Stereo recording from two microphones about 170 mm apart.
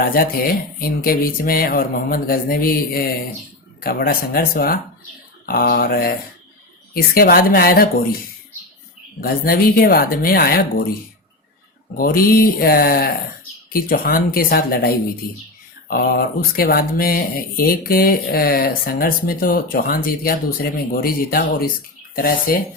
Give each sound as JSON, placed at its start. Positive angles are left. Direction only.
{"t": 0.0, "sound": "speech", "side_deg": 60}
{"t": 9.2, "sound": "speech", "side_deg": 60}
{"t": 11.9, "sound": "speech", "side_deg": 60}